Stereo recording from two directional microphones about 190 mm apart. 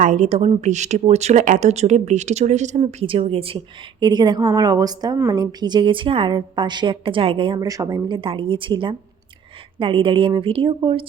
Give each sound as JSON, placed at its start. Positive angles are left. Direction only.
{"t": 0.0, "sound": "a woman's voice", "side_deg": -40}